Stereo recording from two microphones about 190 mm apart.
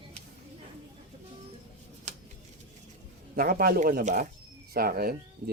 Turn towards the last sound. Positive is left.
turn(degrees=-50)  # may be behind; listen again after turning